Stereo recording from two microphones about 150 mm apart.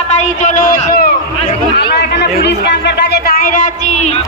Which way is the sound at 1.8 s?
90° left.